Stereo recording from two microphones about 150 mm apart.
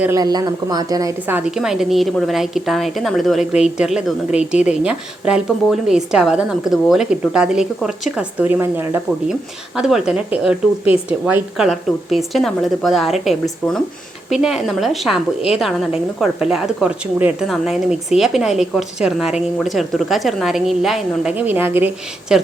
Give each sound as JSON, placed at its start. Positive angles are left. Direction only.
{"t": 0.2, "sound": "a woman's voice", "side_deg": -25}
{"t": 1.3, "sound": "a woman's voice", "side_deg": -10}
{"t": 9.7, "sound": "a woman's voice", "side_deg": -5}